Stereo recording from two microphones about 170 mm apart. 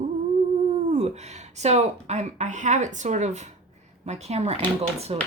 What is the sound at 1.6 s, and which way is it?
Speech, 40° right (ahead or behind).